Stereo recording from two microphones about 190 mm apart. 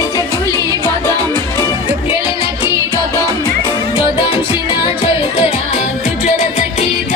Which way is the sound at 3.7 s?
25° left (ahead or behind).